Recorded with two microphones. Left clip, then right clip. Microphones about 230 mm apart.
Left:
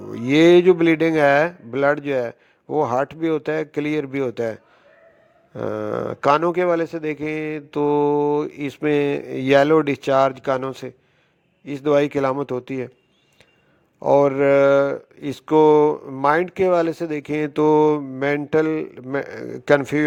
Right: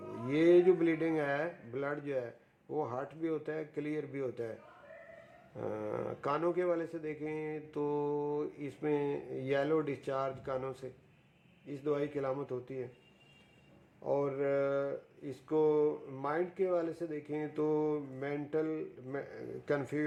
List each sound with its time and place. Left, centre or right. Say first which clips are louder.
0.1 s speech: left 14 dB; left
5.5 s speech: left 14 dB; left
14.0 s speech: left 18 dB; left